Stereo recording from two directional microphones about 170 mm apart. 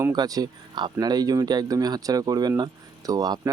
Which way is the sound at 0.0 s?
20° right (ahead or behind).